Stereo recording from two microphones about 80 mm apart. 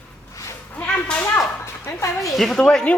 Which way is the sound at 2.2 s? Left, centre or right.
Centre.